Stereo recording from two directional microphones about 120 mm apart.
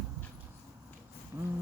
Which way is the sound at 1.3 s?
30° right (ahead or behind).